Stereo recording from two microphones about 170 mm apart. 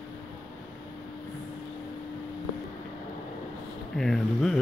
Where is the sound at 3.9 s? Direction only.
Centre (ahead or behind).